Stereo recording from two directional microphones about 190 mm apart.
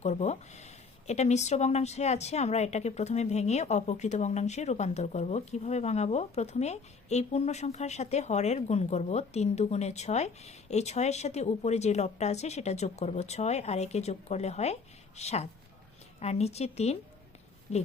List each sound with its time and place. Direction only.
0.0 s speech: 35° left (ahead or behind)